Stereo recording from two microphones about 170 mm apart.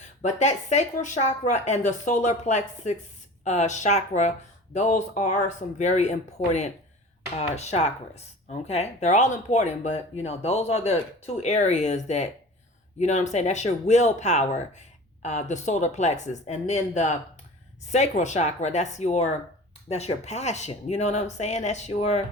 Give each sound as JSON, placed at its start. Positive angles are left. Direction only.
{"t": 0.2, "sound": "speech", "side_deg": 45}